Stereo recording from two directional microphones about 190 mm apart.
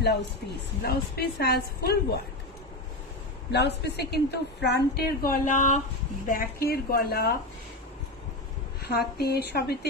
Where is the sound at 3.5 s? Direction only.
60° left (ahead or behind); by 5.7 s 40° left (ahead or behind).